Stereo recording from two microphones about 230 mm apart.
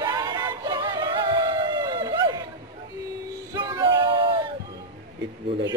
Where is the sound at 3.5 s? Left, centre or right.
Centre.